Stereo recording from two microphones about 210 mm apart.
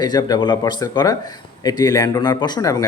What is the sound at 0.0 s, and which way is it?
Speech, 20° left (ahead or behind).